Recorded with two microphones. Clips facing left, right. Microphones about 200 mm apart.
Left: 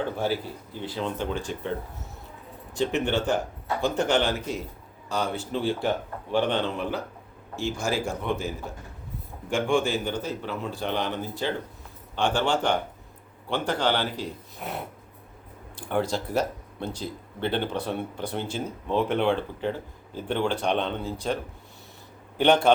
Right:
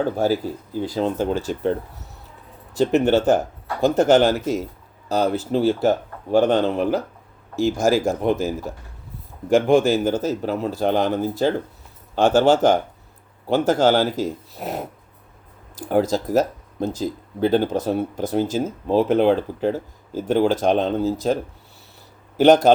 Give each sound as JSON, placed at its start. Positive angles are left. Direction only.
{"t": 0.0, "sound": "speech", "side_deg": -40}
{"t": 2.7, "sound": "speech", "side_deg": -40}
{"t": 22.4, "sound": "speech", "side_deg": -40}